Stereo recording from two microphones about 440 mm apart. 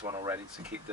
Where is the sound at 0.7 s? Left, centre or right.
Right.